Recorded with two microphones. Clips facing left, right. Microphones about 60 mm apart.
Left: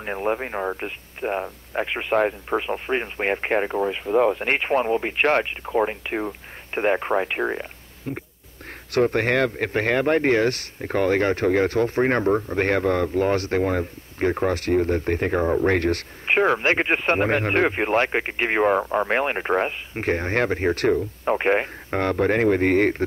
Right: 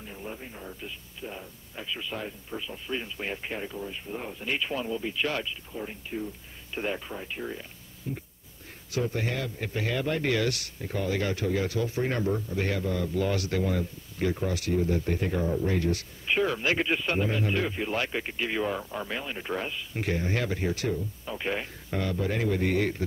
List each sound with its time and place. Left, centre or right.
0.0 s speech: left
4.5 s speech: left
6.7 s a man's voice: left